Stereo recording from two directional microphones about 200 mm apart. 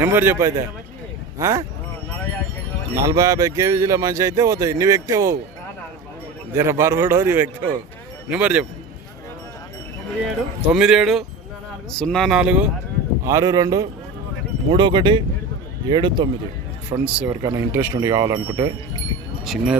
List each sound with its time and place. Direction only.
0.0 s speech: 10° right (ahead or behind)
2.9 s speech: 15° right (ahead or behind)
6.5 s speech: 10° right (ahead or behind)
10.2 s speech: 5° right (ahead or behind)
13.2 s speech: 15° right (ahead or behind)
17.0 s speech: 5° right (ahead or behind)
17.4 s speech: 20° right (ahead or behind)
19.5 s speech: 5° right (ahead or behind)